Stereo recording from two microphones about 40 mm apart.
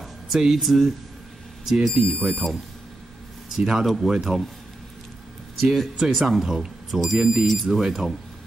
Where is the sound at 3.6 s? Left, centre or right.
Centre.